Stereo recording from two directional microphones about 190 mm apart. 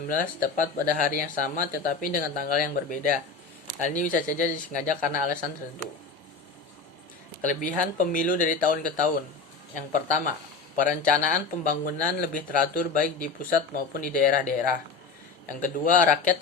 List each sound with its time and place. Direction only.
0.1 s speech: 45° left (ahead or behind)
7.4 s speech: 40° left (ahead or behind)